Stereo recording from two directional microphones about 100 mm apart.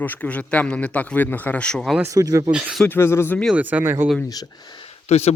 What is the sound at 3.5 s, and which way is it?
Speech, 20° right (ahead or behind).